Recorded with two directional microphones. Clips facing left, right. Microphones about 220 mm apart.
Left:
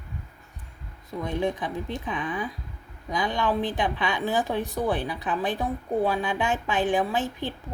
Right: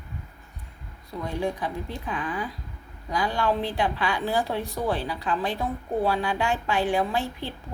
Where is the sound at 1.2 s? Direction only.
20° left (ahead or behind).